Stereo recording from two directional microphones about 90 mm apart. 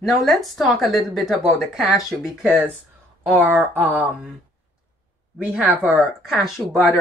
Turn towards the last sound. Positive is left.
turn(degrees=0)  # may be behind; listen again after turning